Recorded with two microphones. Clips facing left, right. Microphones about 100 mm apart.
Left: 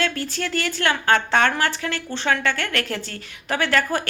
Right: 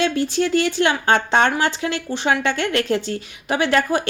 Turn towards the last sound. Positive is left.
turn(degrees=-20)  # may be behind; listen again after turning